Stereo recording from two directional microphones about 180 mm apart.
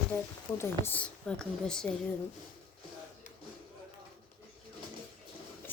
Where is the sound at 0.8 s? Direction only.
10° left (ahead or behind).